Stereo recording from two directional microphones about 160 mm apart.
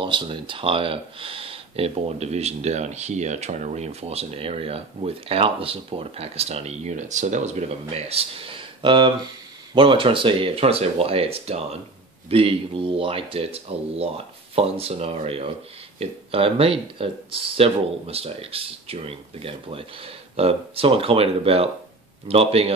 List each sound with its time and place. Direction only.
0.0 s speech: 30° right (ahead or behind)